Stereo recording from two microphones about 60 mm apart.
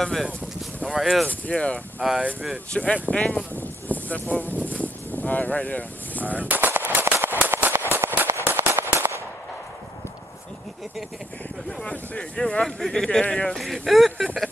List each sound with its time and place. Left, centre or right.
0.0 s speech: centre
1.2 s speech: left
2.0 s speech: centre
2.7 s speech: centre
3.5 s a sound: left
4.6 s vehicle: left
6.3 s machine gun: right
6.9 s a sound: right
8.3 s firecracker: right
11.8 s speech: centre
13.6 s speech: centre